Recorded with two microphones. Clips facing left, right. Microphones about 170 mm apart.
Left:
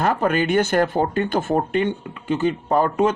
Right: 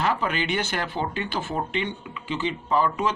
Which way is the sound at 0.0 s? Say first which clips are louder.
Left 6 dB; 50° left (ahead or behind).